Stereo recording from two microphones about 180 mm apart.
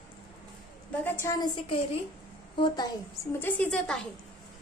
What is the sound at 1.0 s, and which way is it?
Speech, 10° left (ahead or behind).